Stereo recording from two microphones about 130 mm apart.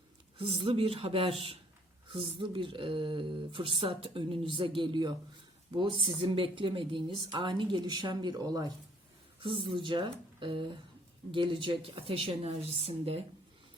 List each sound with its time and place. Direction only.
0.3 s a woman's voice: 40° right (ahead or behind)